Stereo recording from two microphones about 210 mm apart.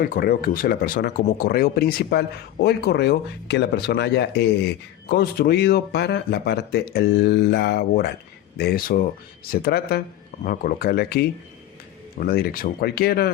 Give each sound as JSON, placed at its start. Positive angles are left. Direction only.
{"t": 0.0, "sound": "speech", "side_deg": 45}